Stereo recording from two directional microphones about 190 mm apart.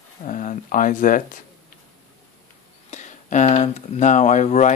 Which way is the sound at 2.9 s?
40° left (ahead or behind).